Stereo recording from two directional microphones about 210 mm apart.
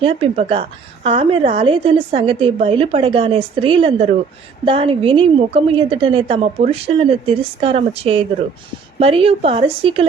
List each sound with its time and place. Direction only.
0.0 s a woman's voice: 25° right (ahead or behind)